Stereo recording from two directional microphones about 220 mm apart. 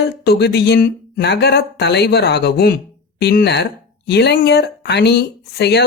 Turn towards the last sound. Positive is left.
turn(degrees=50)  # may be behind; listen again after turning